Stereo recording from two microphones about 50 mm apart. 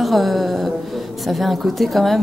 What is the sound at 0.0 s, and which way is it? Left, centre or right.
Music, centre.